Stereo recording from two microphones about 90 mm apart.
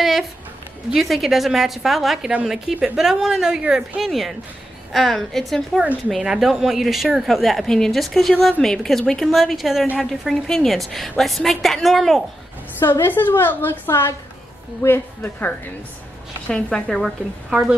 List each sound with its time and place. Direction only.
0.0 s a woman's voice: 5° right (ahead or behind)
12.7 s a woman's voice: 25° left (ahead or behind)
16.4 s a woman's voice: 10° left (ahead or behind)
17.5 s speech: 10° right (ahead or behind)